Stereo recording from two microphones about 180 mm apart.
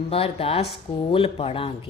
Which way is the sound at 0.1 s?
35° left (ahead or behind).